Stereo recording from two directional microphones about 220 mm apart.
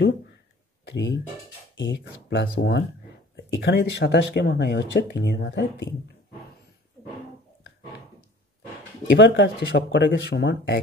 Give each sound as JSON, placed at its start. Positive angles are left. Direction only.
{"t": 0.8, "sound": "speech", "side_deg": 55}
{"t": 9.1, "sound": "speech", "side_deg": 55}